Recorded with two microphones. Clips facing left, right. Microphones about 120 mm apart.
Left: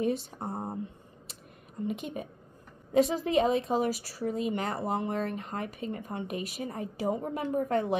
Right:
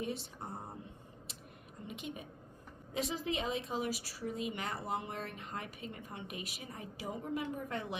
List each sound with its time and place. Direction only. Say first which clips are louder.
0.0 s speech: left 10 dB; 50° left (ahead or behind)
1.9 s a woman's voice: left 8 dB; 45° left (ahead or behind)